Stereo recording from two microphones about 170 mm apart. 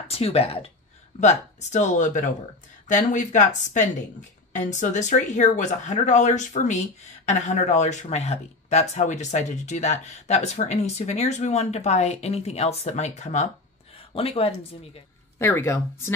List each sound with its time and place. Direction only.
0.1 s speech: 35° left (ahead or behind)
15.3 s speech: 15° left (ahead or behind)